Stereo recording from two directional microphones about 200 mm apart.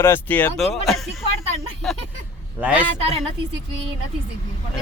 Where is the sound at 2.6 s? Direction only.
5° right (ahead or behind).